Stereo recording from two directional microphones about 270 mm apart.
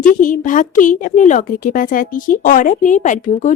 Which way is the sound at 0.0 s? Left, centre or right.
Left.